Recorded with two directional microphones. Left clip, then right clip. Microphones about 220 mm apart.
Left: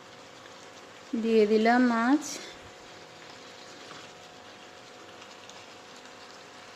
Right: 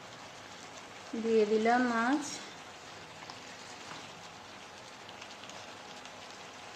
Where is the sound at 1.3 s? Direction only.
35° left (ahead or behind).